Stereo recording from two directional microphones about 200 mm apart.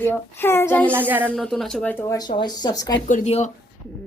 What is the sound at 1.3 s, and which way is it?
Speech, centre (ahead or behind).